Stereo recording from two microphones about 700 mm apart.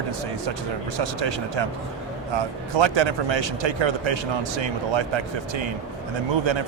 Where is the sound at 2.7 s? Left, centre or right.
Right.